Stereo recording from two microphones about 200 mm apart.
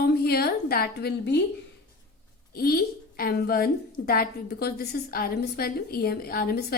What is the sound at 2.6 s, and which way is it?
A woman's voice, 50° left (ahead or behind).